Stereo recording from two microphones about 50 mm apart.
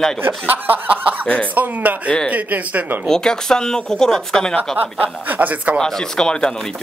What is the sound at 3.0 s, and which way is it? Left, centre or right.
Speech, centre.